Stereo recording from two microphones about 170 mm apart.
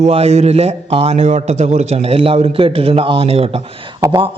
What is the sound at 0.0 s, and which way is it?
A man's voice, 40° right (ahead or behind).